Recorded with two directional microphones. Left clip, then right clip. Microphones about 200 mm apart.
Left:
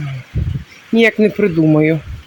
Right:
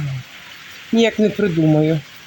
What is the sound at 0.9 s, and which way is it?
Speech, 10° left (ahead or behind).